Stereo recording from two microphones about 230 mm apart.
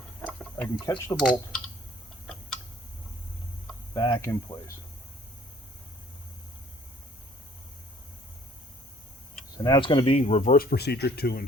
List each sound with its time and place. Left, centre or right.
0.2 s tick-tock: centre
1.2 s speech: centre
3.9 s speech: centre
9.6 s speech: centre; by 11.4 s left